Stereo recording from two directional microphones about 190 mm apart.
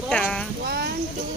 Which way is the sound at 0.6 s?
55° right (ahead or behind).